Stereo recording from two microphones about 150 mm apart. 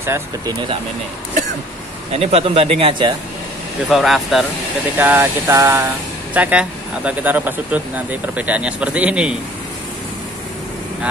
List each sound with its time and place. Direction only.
0.0 s speech: 15° right (ahead or behind)
2.1 s a man's voice: 40° right (ahead or behind)
3.9 s speech: centre (ahead or behind)
4.9 s speech: 10° right (ahead or behind)